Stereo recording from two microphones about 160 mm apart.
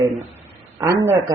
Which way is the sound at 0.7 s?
20° right (ahead or behind).